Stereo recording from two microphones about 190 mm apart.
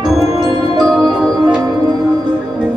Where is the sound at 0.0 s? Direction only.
20° right (ahead or behind).